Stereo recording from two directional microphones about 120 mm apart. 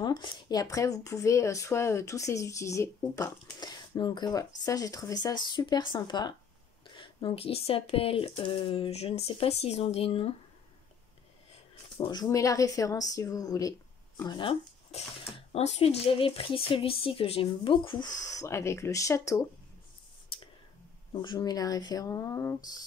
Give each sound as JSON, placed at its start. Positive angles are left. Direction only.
{"t": 0.0, "sound": "speech", "side_deg": 35}
{"t": 12.0, "sound": "speech", "side_deg": 35}
{"t": 15.5, "sound": "speech", "side_deg": 60}
{"t": 21.1, "sound": "speech", "side_deg": 40}